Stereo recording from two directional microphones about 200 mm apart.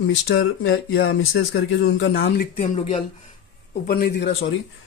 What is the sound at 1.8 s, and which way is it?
Speech, 65° left (ahead or behind).